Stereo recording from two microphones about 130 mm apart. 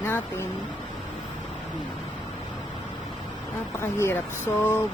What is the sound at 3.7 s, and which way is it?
Speech, 20° left (ahead or behind).